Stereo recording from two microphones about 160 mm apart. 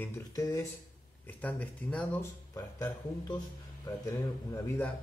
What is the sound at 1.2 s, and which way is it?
Speech, 10° left (ahead or behind).